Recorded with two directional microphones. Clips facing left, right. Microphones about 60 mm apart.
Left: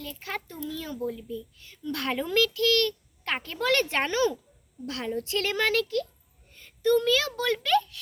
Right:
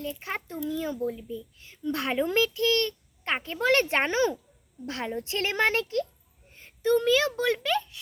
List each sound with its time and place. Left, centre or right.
0.1 s speech: centre
3.7 s a child's voice: right